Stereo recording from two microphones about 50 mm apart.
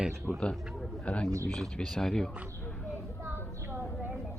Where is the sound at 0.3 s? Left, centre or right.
Centre.